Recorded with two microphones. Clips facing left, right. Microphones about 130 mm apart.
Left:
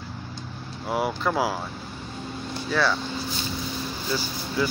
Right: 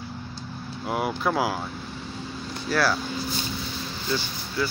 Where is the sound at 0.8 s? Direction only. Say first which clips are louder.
Even; centre (ahead or behind).